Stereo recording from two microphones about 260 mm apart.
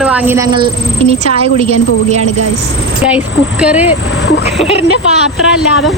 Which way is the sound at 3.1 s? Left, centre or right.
Centre.